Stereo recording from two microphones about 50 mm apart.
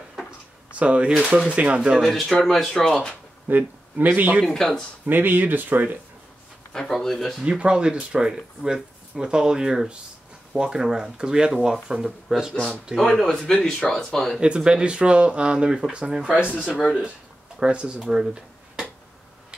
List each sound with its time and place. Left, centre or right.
0.7 s speech: right
2.0 s speech: centre
3.4 s speech: right
4.6 s speech: centre
5.0 s speech: right
6.7 s speech: centre
7.4 s speech: centre
8.3 s speech: centre
13.0 s speech: centre
14.4 s speech: centre